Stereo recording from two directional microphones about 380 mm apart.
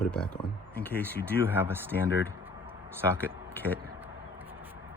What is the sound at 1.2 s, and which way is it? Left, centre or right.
Speech, centre.